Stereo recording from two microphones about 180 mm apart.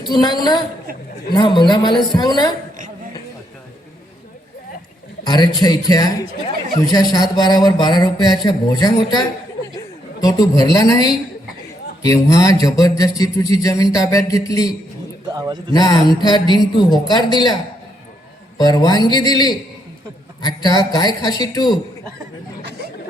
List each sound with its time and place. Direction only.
0.0 s speech: 25° left (ahead or behind)
5.2 s speech: 25° left (ahead or behind)
15.3 s a man's voice: 20° right (ahead or behind)
15.7 s speech: 20° left (ahead or behind)
18.5 s speech: 20° left (ahead or behind)